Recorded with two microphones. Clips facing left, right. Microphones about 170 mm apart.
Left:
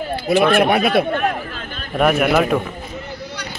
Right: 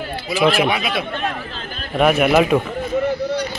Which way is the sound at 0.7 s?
50° left (ahead or behind).